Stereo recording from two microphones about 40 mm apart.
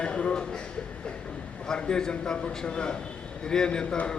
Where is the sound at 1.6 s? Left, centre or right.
Centre.